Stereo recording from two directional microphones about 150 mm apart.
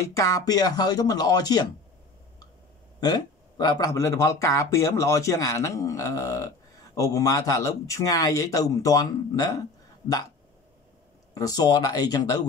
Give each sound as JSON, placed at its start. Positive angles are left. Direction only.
{"t": 0.2, "sound": "speech", "side_deg": 25}
{"t": 3.0, "sound": "speech", "side_deg": 25}
{"t": 11.3, "sound": "speech", "side_deg": 25}